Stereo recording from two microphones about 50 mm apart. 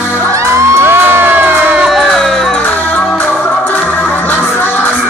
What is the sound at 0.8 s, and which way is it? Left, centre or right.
Crowd, right.